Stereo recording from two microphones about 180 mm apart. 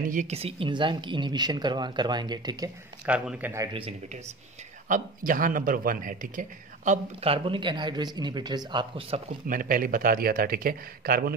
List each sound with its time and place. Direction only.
0.1 s speech: 40° right (ahead or behind); by 2.7 s 25° right (ahead or behind)
3.1 s a man's voice: 10° right (ahead or behind)
4.8 s speech: 50° right (ahead or behind)
7.3 s speech: 30° right (ahead or behind)
9.5 s speech: 50° right (ahead or behind)